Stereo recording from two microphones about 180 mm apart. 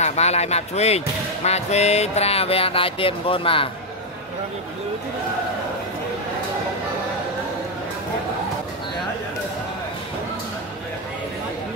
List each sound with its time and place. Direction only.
0.0 s speech: 40° left (ahead or behind)